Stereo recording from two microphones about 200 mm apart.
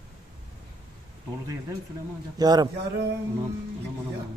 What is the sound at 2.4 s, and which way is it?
Speech, 20° right (ahead or behind).